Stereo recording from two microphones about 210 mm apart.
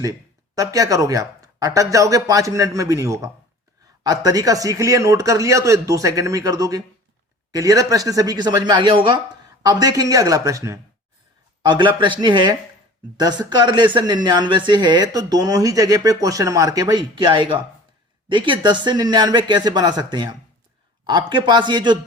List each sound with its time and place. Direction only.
0.0 s speech: 15° right (ahead or behind)